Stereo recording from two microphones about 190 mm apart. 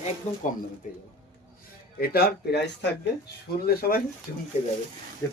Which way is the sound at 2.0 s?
55° left (ahead or behind).